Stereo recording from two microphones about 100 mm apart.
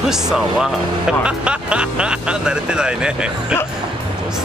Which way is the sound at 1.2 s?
10° right (ahead or behind).